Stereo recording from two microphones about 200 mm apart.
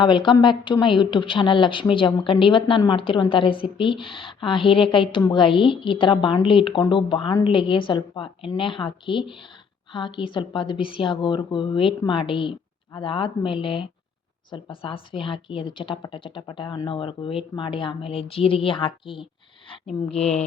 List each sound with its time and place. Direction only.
0.0 s speech: 20° left (ahead or behind)